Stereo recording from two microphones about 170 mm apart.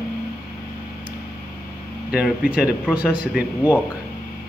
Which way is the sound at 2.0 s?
5° right (ahead or behind).